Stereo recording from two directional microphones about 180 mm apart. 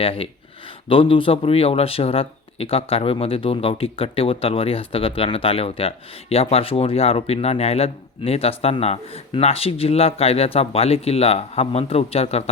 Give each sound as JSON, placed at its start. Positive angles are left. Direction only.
{"t": 0.0, "sound": "speech", "side_deg": 30}